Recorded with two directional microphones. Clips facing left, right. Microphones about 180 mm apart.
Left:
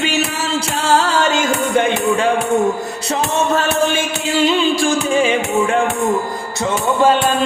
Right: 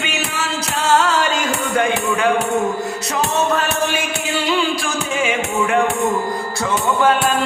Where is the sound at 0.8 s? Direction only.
30° left (ahead or behind).